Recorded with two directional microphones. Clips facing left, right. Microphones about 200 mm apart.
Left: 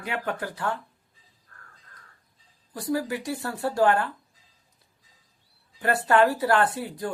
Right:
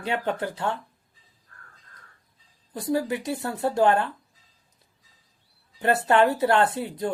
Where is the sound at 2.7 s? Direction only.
25° right (ahead or behind).